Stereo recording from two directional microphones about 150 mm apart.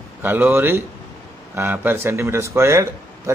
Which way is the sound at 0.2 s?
15° right (ahead or behind).